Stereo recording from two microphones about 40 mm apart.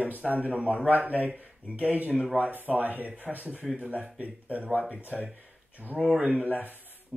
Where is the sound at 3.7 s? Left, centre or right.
Right.